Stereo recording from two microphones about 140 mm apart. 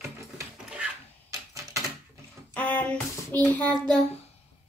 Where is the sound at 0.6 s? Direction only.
5° right (ahead or behind).